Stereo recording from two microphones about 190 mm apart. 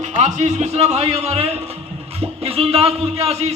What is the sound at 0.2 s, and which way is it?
A man's voice, 35° right (ahead or behind).